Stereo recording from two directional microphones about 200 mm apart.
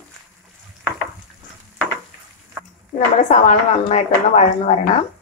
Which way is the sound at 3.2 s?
35° left (ahead or behind).